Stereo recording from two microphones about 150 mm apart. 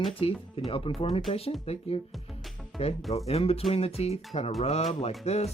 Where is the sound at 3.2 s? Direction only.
40° left (ahead or behind).